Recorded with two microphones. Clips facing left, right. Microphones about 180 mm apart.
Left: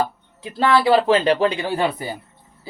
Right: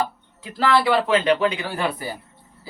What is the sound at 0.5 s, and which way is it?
Speech, 30° left (ahead or behind).